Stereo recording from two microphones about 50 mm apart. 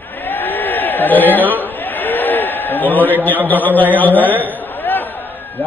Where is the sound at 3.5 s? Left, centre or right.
Left.